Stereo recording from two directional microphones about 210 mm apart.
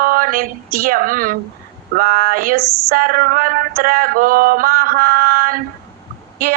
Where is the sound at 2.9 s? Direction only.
40° right (ahead or behind).